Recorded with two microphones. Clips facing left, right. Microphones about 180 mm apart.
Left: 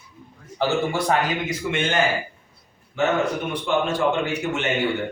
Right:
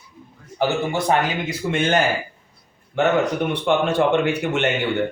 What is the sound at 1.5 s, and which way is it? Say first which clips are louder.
Speech: right 4 dB; 40° right (ahead or behind).